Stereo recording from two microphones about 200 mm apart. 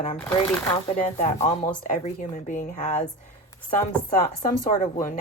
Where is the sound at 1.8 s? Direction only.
40° left (ahead or behind).